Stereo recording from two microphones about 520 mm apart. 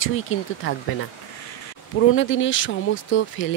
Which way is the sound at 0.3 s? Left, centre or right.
Left.